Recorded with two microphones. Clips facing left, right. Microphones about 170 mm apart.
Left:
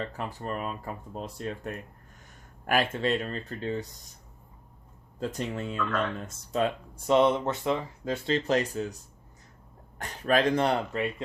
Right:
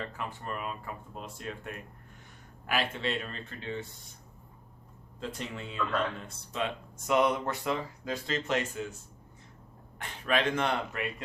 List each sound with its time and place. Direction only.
0.0 s speech: 35° left (ahead or behind)
5.2 s speech: 45° left (ahead or behind)
7.1 s speech: 25° left (ahead or behind)
10.0 s speech: 40° left (ahead or behind)